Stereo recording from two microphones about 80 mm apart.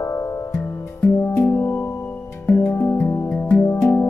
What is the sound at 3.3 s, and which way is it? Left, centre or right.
Music, centre.